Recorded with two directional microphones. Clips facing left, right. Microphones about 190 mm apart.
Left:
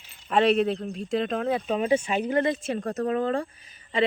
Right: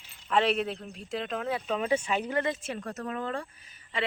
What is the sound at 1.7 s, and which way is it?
Speech, 20° left (ahead or behind).